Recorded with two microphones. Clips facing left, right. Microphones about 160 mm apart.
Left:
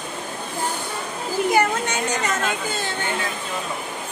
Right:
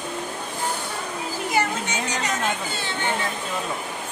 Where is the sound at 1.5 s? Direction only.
55° left (ahead or behind).